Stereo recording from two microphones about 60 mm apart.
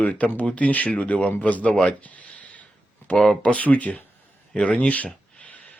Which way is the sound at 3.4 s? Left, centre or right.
Left.